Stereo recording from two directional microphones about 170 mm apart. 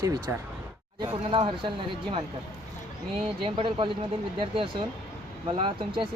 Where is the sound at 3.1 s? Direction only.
30° right (ahead or behind).